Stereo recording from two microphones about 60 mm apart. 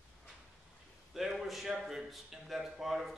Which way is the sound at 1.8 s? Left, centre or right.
Centre.